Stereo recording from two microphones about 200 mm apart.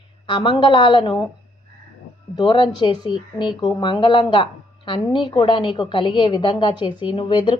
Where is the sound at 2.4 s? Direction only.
20° left (ahead or behind).